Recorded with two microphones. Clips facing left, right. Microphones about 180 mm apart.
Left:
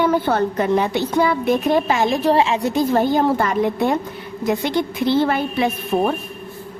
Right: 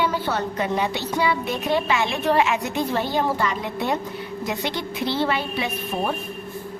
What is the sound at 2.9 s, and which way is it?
A woman's voice, 50° left (ahead or behind).